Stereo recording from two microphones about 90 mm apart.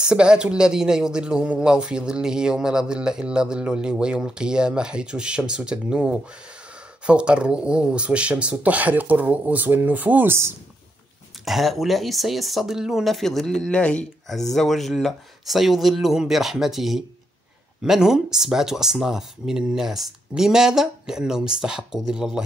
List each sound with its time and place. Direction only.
0.0 s speech: 10° right (ahead or behind); by 10.5 s 25° right (ahead or behind)
11.4 s speech: centre (ahead or behind)
14.3 s speech: 5° left (ahead or behind)